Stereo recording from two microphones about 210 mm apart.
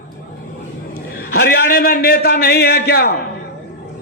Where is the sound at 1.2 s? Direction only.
50° left (ahead or behind).